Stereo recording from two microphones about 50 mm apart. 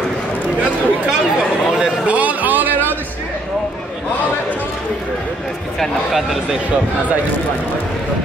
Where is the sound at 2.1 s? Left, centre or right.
Right.